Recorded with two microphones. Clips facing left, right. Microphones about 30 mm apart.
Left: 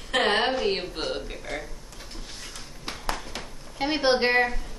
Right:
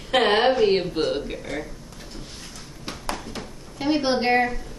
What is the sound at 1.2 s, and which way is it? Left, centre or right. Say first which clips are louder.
Speech: right 5 dB; centre.